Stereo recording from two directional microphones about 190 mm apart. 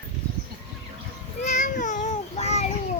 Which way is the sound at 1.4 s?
40° left (ahead or behind).